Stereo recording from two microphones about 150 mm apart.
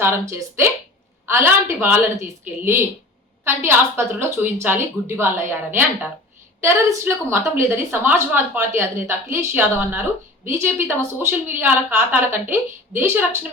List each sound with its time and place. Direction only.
0.0 s a woman's voice: 15° right (ahead or behind)